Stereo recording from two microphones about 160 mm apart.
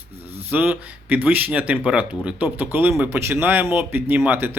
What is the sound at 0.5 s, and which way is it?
Speech, 10° right (ahead or behind).